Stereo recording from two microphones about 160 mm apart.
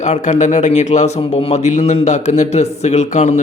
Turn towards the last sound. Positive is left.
turn(degrees=45)  # may be behind; listen again after turning